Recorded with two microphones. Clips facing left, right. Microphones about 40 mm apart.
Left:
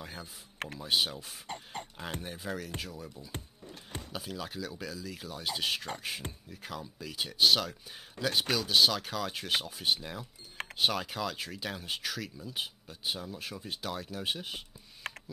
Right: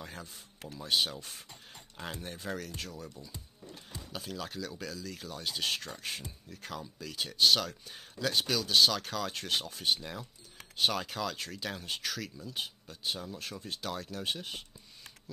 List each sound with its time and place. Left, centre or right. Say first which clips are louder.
0.0 s speech: left 1 dB; centre
1.5 s speech: left 11 dB; left
2.2 s speech: left 1 dB; centre
15.0 s a sound: left 17 dB; left